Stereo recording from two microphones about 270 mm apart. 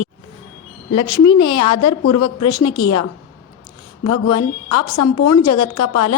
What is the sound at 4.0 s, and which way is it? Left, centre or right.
A woman's voice, left.